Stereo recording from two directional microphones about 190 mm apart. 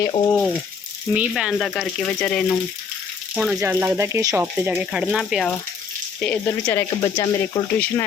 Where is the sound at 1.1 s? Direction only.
5° right (ahead or behind).